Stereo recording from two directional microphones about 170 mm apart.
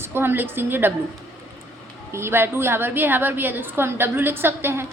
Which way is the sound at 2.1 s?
15° right (ahead or behind).